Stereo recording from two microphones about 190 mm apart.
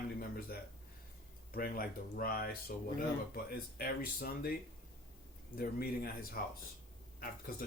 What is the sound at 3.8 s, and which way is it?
Speech, 50° left (ahead or behind).